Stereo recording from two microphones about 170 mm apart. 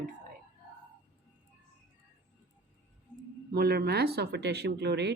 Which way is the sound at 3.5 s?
70° right (ahead or behind).